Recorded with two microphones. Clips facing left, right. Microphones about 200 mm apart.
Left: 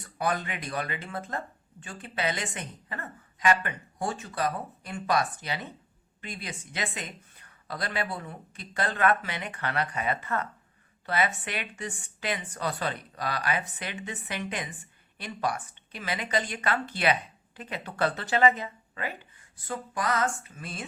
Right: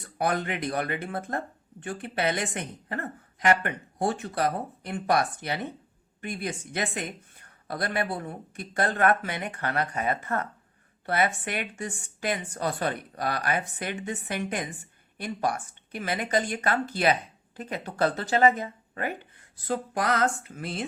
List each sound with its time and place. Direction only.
0.2 s a woman's voice: 60° right (ahead or behind)